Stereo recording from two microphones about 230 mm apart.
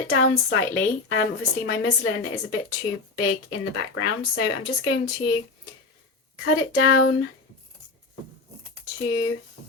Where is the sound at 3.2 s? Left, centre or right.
Left.